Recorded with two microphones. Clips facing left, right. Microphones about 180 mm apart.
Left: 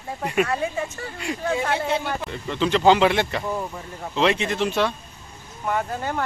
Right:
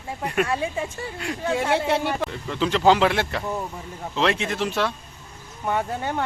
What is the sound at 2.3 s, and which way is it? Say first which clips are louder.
Speech: left 2 dB; centre (ahead or behind).